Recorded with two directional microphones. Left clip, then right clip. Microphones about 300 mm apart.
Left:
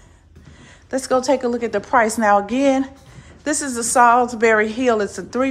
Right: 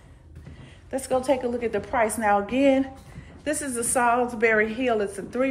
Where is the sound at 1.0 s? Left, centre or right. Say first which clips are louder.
Left 6 dB; centre.